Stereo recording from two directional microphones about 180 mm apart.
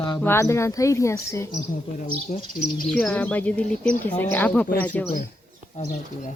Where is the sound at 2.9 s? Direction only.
5° left (ahead or behind).